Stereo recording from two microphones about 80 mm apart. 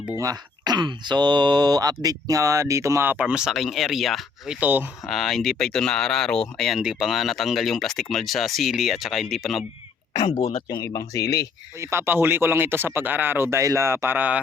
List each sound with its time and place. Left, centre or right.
0.2 s speech: right
0.7 s speech: right
3.1 s speech: centre
3.4 s speech: centre
4.6 s speech: right
5.0 s speech: centre
6.7 s speech: centre
10.1 s speech: left
10.8 s speech: left
11.8 s speech: right